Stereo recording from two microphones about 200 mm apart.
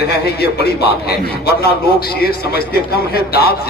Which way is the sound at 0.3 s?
50° left (ahead or behind).